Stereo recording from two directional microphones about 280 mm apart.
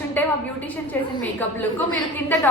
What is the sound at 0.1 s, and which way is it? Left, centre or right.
A woman's voice, centre.